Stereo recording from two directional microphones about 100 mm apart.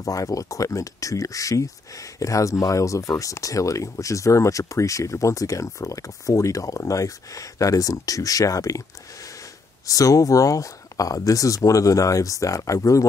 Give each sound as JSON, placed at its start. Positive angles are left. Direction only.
{"t": 0.0, "sound": "speech", "side_deg": 35}
{"t": 9.8, "sound": "speech", "side_deg": 35}